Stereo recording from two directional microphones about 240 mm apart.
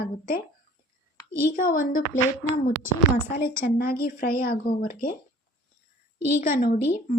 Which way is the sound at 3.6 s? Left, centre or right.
Left.